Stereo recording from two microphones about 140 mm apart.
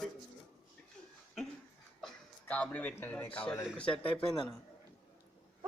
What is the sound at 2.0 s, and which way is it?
Speech, 10° left (ahead or behind).